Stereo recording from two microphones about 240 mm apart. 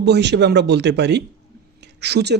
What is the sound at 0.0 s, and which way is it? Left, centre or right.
Speech, right.